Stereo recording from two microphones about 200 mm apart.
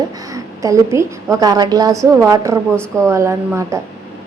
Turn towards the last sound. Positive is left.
turn(degrees=-15)  # may be behind; listen again after turning